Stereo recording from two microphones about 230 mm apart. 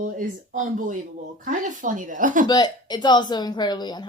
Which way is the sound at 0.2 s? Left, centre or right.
Right.